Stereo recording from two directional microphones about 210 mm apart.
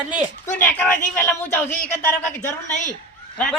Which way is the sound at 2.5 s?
35° left (ahead or behind).